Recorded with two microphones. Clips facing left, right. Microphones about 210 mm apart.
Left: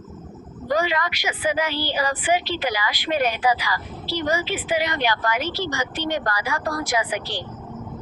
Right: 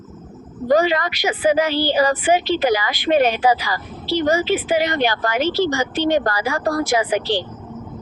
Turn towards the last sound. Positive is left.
turn(degrees=-25)  # may be behind; listen again after turning